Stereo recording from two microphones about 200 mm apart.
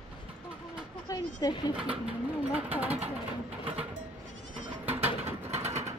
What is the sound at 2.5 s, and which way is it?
Vehicle, 10° right (ahead or behind).